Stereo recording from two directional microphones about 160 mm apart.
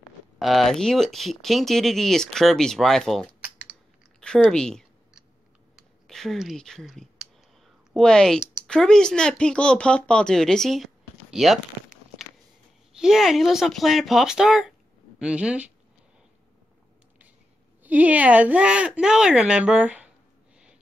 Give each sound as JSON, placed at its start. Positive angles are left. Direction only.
{"t": 0.4, "sound": "speech", "side_deg": 0}
{"t": 4.2, "sound": "a sound", "side_deg": 5}
{"t": 5.8, "sound": "speech", "side_deg": 0}
{"t": 12.9, "sound": "speech", "side_deg": -5}
{"t": 17.8, "sound": "speech", "side_deg": -10}